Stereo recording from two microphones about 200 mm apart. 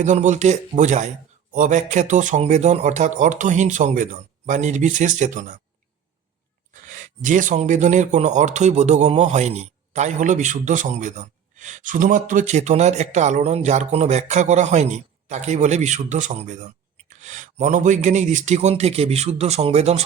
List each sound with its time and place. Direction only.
0.0 s speech: 35° right (ahead or behind)
6.9 s speech: 40° right (ahead or behind)